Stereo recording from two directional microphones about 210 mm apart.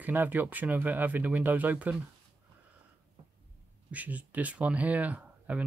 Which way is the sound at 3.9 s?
5° right (ahead or behind).